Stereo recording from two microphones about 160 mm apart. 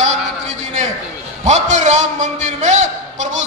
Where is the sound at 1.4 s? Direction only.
45° right (ahead or behind).